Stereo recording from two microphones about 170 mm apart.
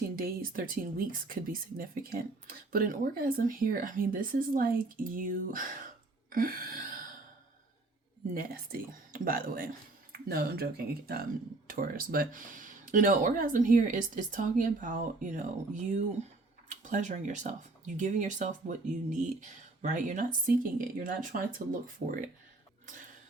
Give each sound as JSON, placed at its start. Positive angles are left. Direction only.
{"t": 0.2, "sound": "speech", "side_deg": -60}
{"t": 6.3, "sound": "a sound", "side_deg": -60}
{"t": 8.3, "sound": "speech", "side_deg": -55}